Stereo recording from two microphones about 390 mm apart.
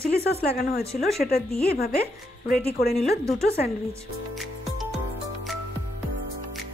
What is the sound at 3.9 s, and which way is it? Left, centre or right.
Speech, centre.